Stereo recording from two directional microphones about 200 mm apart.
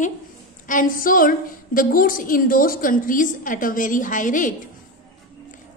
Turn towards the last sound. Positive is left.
turn(degrees=40)  # may be behind; listen again after turning